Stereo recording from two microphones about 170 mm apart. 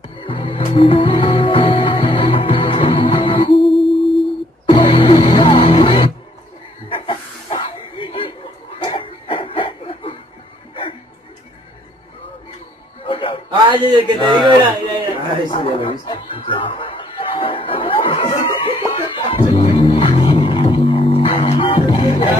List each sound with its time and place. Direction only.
0.2 s music: 30° left (ahead or behind)
3.5 s music: centre (ahead or behind)
4.6 s music: 30° left (ahead or behind)
6.9 s chuckle: 30° left (ahead or behind)
13.0 s music: 30° left (ahead or behind)
13.5 s a sound: 30° right (ahead or behind)
15.5 s music: 30° left (ahead or behind)